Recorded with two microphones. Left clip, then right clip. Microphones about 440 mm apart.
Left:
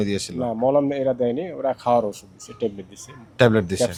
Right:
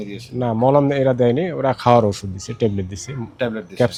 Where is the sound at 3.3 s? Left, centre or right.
Left.